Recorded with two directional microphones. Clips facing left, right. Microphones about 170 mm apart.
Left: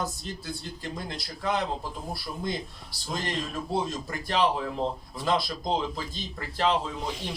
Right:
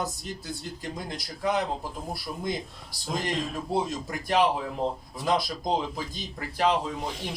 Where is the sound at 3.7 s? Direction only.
15° right (ahead or behind).